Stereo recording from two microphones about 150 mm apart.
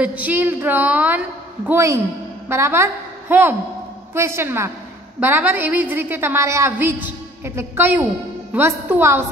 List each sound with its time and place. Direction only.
0.0 s a woman's voice: 10° right (ahead or behind)